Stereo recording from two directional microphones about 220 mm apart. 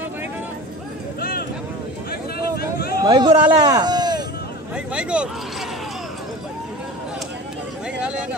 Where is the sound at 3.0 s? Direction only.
20° right (ahead or behind).